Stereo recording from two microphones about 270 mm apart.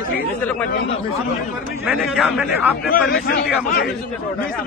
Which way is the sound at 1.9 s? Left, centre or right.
Centre.